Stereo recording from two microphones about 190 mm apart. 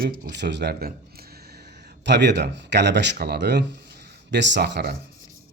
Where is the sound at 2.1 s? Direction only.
65° right (ahead or behind).